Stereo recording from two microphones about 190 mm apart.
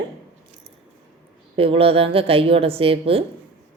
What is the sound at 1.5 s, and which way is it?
Speech, 30° right (ahead or behind).